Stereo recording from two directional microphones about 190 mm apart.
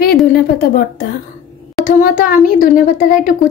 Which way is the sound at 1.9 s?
45° left (ahead or behind).